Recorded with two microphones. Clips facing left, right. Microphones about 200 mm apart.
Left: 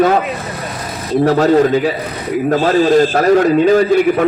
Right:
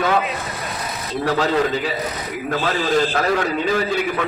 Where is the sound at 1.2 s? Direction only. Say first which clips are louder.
Left 8 dB; 45° left (ahead or behind).